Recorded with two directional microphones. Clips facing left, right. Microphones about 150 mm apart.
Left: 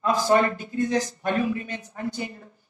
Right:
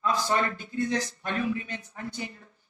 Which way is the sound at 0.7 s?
45° left (ahead or behind).